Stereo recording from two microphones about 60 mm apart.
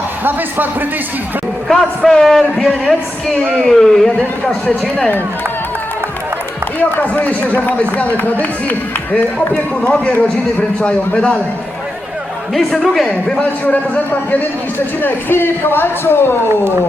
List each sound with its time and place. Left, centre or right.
0.3 s a man's voice: right
1.6 s a man's voice: centre
4.6 s speech: left
6.7 s speech: left
9.8 s speech: left
12.5 s a man's voice: centre
13.7 s speech: left
15.0 s a man's voice: left